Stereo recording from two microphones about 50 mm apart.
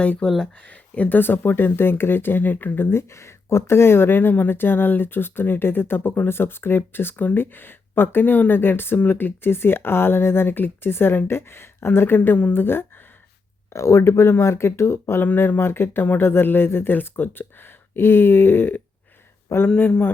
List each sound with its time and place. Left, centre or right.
0.0 s speech: left
1.2 s speech: left
3.1 s speech: left
13.7 s speech: left
15.2 s speech: left
19.6 s speech: left